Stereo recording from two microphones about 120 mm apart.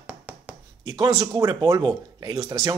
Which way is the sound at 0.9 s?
45° right (ahead or behind).